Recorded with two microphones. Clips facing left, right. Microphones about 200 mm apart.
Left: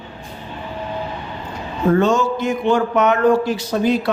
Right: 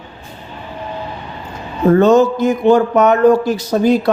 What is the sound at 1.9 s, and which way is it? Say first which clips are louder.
A man's voice: right 8 dB; 40° right (ahead or behind).